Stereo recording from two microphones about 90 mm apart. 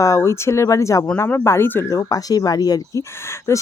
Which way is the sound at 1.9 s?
40° left (ahead or behind).